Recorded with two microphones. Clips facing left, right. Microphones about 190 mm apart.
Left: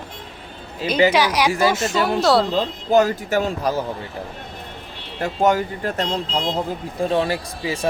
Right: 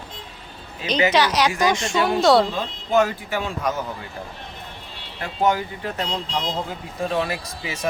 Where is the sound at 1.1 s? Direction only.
10° left (ahead or behind).